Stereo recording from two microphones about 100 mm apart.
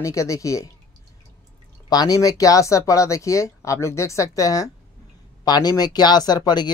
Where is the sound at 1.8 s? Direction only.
40° left (ahead or behind).